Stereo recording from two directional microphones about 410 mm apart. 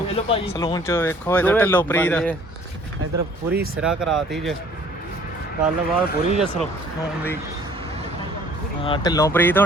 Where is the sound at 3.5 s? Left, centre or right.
Right.